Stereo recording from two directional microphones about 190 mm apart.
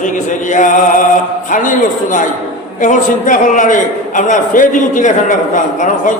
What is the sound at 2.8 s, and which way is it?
A man's voice, 40° left (ahead or behind).